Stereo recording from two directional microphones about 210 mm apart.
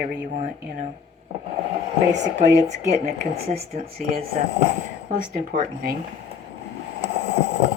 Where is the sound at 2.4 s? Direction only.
30° right (ahead or behind).